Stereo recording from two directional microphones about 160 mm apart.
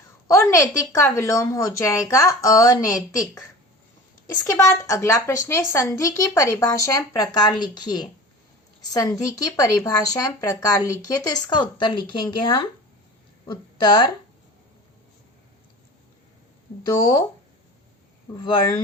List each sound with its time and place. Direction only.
0.3 s a sound: 20° left (ahead or behind)
0.9 s speech: 15° left (ahead or behind)
4.4 s a woman's voice: 20° left (ahead or behind)
17.0 s speech: 25° left (ahead or behind)
18.4 s a woman's voice: 30° left (ahead or behind)